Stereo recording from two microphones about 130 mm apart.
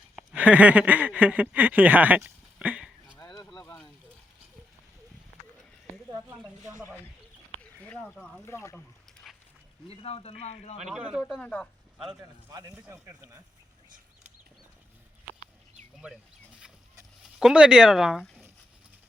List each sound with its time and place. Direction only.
0.2 s speech: 10° right (ahead or behind)
3.2 s a sound: 35° left (ahead or behind)
6.7 s a sound: 25° left (ahead or behind)
7.6 s a sound: 10° left (ahead or behind)
8.4 s speech: 20° left (ahead or behind)
9.2 s dog: centre (ahead or behind)
9.9 s speech: 45° left (ahead or behind)
10.8 s speech: 5° right (ahead or behind)
11.3 s speech: 10° left (ahead or behind)
12.2 s a man's voice: 30° right (ahead or behind)
16.0 s speech: 10° right (ahead or behind)
17.4 s speech: 5° right (ahead or behind)